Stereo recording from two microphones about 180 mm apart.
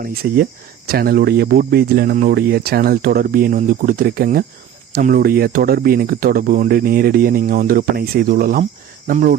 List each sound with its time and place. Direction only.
0.0 s speech: 55° right (ahead or behind)